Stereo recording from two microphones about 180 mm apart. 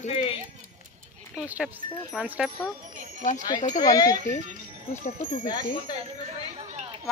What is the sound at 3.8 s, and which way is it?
Speech, 20° left (ahead or behind).